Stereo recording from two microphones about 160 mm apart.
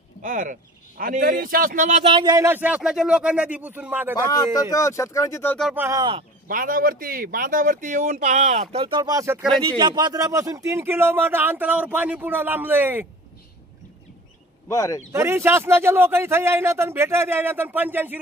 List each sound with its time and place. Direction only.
0.2 s a man's voice: 55° right (ahead or behind)
2.0 s speech: 30° right (ahead or behind)
2.3 s speech: 15° right (ahead or behind)
4.3 s speech: 25° left (ahead or behind)
5.8 s speech: 20° right (ahead or behind)
6.4 s a man's voice: 60° right (ahead or behind); by 13.0 s 10° right (ahead or behind)
14.7 s speech: 20° left (ahead or behind)
15.1 s speech: 15° right (ahead or behind)